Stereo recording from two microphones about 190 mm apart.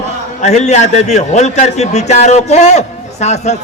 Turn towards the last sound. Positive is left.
turn(degrees=35)  # may be behind; listen again after turning